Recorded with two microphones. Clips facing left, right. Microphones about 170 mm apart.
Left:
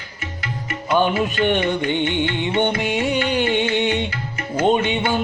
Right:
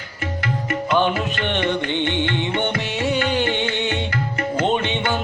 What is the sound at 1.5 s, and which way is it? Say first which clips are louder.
Music: left 2 dB; 10° left (ahead or behind).